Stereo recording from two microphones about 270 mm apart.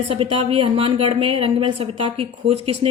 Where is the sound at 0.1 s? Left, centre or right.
Right.